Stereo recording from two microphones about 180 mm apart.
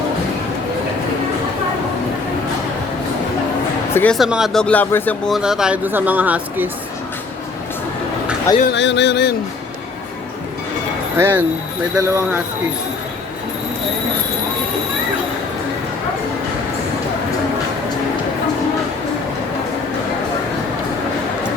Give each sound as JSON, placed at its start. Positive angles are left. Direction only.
{"t": 3.9, "sound": "speech", "side_deg": 5}
{"t": 8.7, "sound": "a sound", "side_deg": 80}
{"t": 11.2, "sound": "speech", "side_deg": -10}